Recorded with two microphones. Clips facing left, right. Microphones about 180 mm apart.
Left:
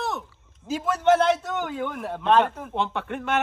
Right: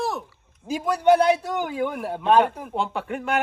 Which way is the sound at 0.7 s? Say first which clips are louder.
Right 2 dB; 15° right (ahead or behind).